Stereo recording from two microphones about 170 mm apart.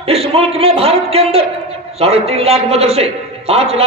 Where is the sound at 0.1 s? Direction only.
35° right (ahead or behind).